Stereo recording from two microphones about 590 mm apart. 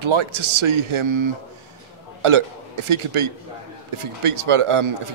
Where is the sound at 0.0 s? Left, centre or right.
Right.